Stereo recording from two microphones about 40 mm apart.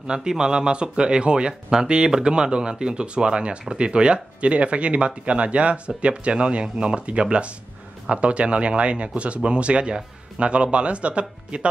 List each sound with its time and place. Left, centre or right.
0.0 s speech: centre